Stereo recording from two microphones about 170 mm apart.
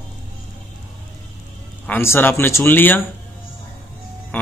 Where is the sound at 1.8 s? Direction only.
10° left (ahead or behind).